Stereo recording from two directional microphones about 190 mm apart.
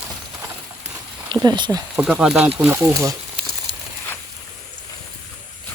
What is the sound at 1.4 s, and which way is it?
Speech, 20° right (ahead or behind).